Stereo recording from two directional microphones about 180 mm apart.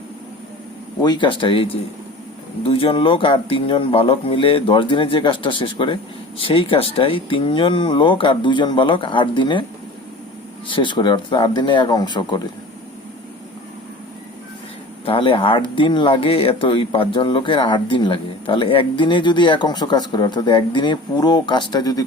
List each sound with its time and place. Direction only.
1.0 s speech: 25° left (ahead or behind)
10.7 s speech: 25° left (ahead or behind)
15.0 s speech: 30° left (ahead or behind)